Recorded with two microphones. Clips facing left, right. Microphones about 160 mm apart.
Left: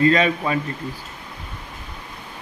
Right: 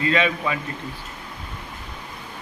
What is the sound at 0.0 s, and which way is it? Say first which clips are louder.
Speech: left 4 dB; 40° left (ahead or behind).